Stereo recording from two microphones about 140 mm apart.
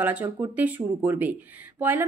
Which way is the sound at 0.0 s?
15° right (ahead or behind).